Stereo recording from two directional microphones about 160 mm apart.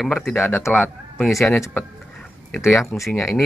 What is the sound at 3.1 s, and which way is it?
Speech, 15° left (ahead or behind).